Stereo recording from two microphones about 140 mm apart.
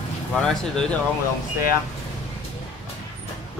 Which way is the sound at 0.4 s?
5° left (ahead or behind).